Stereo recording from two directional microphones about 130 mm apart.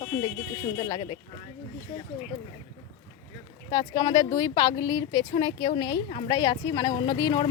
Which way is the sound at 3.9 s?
35° left (ahead or behind).